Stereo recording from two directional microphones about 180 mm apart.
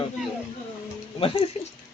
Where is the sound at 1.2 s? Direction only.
30° left (ahead or behind).